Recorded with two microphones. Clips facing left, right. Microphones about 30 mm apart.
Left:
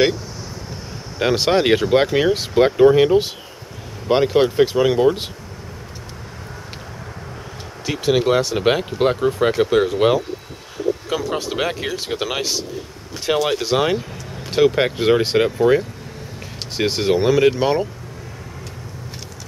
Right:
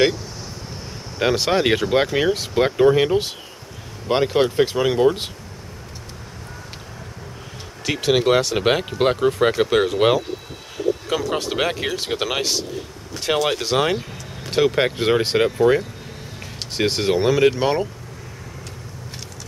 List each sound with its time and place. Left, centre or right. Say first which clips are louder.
1.3 s speech: left 3 dB; centre
8.1 s speech: even; centre